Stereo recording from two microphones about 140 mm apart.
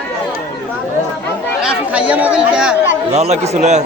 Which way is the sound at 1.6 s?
10° right (ahead or behind).